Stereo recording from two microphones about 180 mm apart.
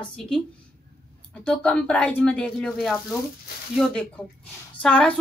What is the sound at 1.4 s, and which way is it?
A woman's voice, 5° left (ahead or behind).